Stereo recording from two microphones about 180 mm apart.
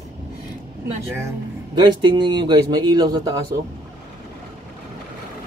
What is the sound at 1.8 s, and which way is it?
Speech, 25° right (ahead or behind).